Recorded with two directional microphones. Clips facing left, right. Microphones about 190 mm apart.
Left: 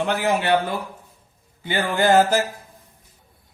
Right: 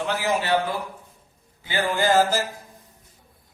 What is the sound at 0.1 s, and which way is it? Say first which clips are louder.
Speech: left 1 dB; 60° left (ahead or behind).